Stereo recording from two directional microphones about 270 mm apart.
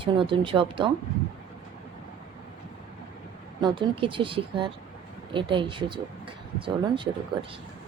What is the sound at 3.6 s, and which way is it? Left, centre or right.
A woman's voice, centre.